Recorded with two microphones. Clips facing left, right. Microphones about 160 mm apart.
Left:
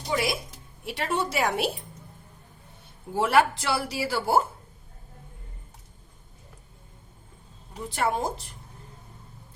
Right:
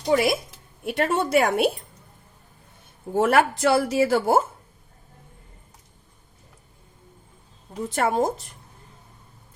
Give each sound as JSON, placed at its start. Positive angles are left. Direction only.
{"t": 0.0, "sound": "a woman's voice", "side_deg": -45}
{"t": 3.2, "sound": "speech", "side_deg": -50}
{"t": 7.9, "sound": "speech", "side_deg": -45}